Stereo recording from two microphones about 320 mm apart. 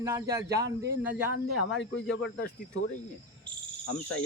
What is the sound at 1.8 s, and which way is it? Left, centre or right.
Speech, left.